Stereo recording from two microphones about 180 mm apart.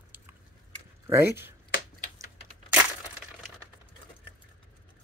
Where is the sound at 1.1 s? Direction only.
15° right (ahead or behind).